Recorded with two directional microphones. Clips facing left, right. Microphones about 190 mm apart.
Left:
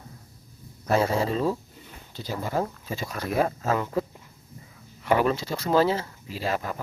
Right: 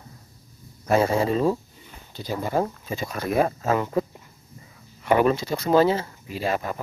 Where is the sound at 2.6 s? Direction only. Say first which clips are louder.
Right 3 dB; 20° right (ahead or behind).